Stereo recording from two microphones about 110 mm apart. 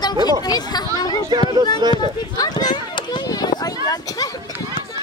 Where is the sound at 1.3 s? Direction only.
45° right (ahead or behind).